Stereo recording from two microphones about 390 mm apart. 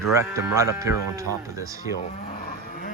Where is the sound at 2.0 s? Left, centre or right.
Centre.